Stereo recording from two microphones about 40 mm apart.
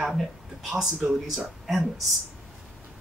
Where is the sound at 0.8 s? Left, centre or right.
Centre.